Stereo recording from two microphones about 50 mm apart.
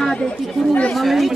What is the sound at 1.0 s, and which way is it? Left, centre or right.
Speech, centre.